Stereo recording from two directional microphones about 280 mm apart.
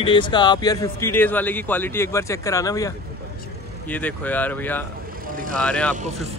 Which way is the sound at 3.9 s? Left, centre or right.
Centre.